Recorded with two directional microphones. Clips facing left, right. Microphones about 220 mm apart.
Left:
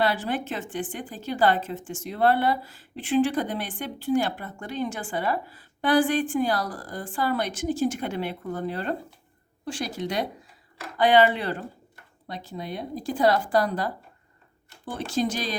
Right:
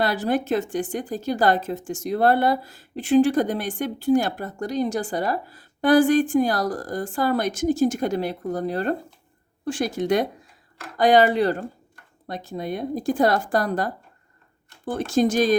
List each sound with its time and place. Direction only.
0.0 s a woman's voice: 40° right (ahead or behind)